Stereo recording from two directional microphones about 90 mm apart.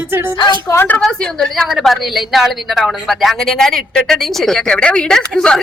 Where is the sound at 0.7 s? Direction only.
25° left (ahead or behind).